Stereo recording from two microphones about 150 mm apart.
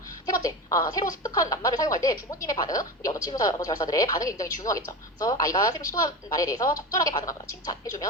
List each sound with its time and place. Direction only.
0.3 s speech: 25° left (ahead or behind)